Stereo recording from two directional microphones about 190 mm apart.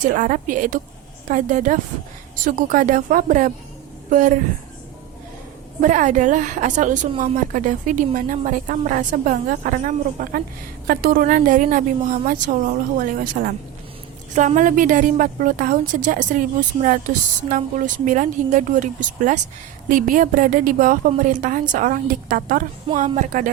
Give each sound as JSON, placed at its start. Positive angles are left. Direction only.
{"t": 0.1, "sound": "a woman's voice", "side_deg": -45}
{"t": 5.8, "sound": "a woman's voice", "side_deg": -40}